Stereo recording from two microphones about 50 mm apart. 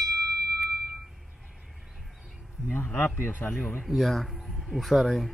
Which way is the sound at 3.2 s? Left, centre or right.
Left.